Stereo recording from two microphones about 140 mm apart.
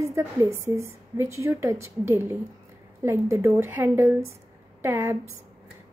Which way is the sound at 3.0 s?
20° right (ahead or behind).